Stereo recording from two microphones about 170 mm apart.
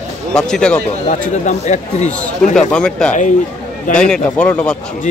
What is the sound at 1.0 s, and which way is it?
Speech, 45° left (ahead or behind).